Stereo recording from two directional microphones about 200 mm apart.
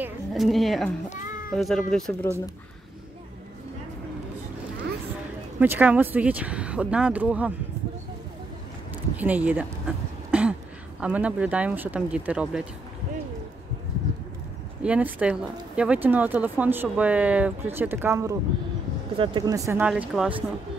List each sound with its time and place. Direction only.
0.0 s a woman's voice: centre (ahead or behind)
5.6 s speech: 10° right (ahead or behind)
8.9 s throat clearing: 10° right (ahead or behind)
11.0 s speech: 5° right (ahead or behind)
14.8 s speech: 5° right (ahead or behind)
19.1 s speech: 25° right (ahead or behind); by 20.3 s 5° right (ahead or behind)